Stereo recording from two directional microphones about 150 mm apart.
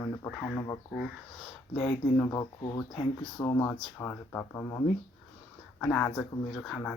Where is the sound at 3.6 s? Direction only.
15° left (ahead or behind).